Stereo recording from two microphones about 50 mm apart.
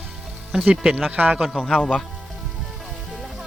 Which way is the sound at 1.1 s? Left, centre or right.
Right.